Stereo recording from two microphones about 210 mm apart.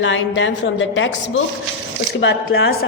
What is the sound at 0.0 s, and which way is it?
A woman's voice, 60° left (ahead or behind).